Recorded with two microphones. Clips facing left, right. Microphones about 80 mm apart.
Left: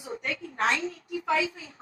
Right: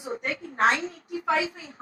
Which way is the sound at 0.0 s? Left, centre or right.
Right.